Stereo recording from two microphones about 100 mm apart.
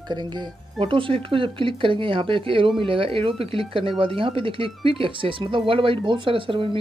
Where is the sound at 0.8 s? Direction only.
65° right (ahead or behind).